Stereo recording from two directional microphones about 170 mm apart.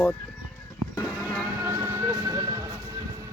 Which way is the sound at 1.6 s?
15° right (ahead or behind).